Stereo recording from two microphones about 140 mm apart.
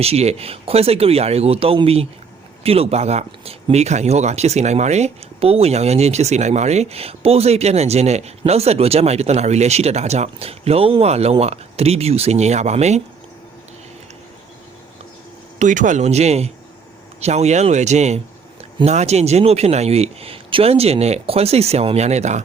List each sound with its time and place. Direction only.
0.0 s speech: 45° right (ahead or behind)
15.5 s speech: 65° right (ahead or behind)